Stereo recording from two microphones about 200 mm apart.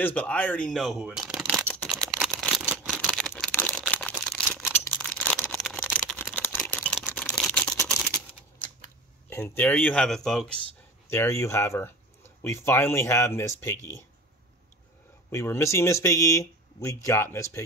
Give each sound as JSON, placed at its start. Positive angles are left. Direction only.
{"t": 0.0, "sound": "speech", "side_deg": 5}
{"t": 1.7, "sound": "camera", "side_deg": 0}
{"t": 2.9, "sound": "a sound", "side_deg": 5}
{"t": 9.6, "sound": "speech", "side_deg": 10}
{"t": 11.1, "sound": "speech", "side_deg": 15}
{"t": 15.3, "sound": "speech", "side_deg": 15}